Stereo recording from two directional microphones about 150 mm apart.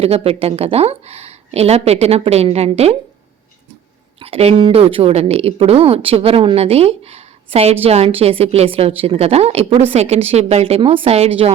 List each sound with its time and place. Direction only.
0.0 s speech: 40° right (ahead or behind)
4.2 s a woman's voice: 40° right (ahead or behind)